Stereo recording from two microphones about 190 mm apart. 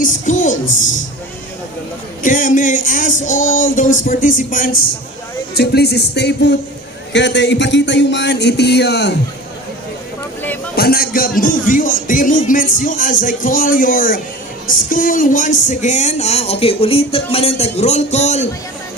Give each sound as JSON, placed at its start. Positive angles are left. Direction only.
{"t": 0.0, "sound": "a sound", "side_deg": 45}
{"t": 2.2, "sound": "music", "side_deg": 45}
{"t": 5.5, "sound": "speech", "side_deg": 60}
{"t": 10.8, "sound": "music", "side_deg": 55}
{"t": 14.7, "sound": "speech", "side_deg": 45}